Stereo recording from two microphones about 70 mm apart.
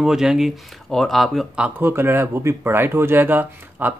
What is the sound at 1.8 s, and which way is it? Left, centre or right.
Speech, right.